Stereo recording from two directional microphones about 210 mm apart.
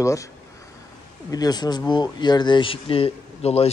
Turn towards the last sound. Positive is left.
turn(degrees=30)  # may be behind; listen again after turning